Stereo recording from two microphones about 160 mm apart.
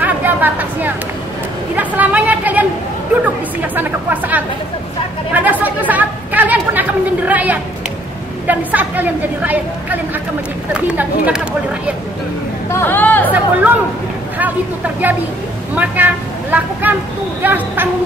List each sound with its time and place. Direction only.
0.0 s a sound: 10° right (ahead or behind)
1.8 s speech: 10° right (ahead or behind)
3.7 s a woman's voice: 10° right (ahead or behind)
12.7 s speech: 15° left (ahead or behind)
13.3 s a woman's voice: 10° right (ahead or behind)
15.7 s a woman's voice: 10° right (ahead or behind)